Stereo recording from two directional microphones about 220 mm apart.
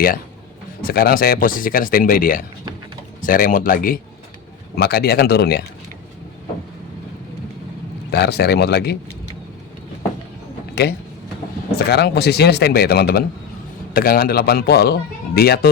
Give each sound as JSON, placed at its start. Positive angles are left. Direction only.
{"t": 0.8, "sound": "speech", "side_deg": 40}
{"t": 8.1, "sound": "speech", "side_deg": 45}
{"t": 10.8, "sound": "speech", "side_deg": 50}